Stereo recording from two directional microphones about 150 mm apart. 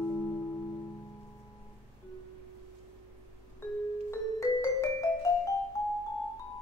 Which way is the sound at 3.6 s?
15° left (ahead or behind).